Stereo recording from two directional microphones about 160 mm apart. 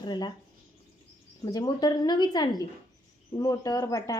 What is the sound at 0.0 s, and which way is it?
Speech, 25° left (ahead or behind).